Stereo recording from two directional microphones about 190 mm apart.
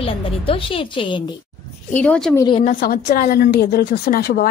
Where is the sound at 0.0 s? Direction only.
30° left (ahead or behind).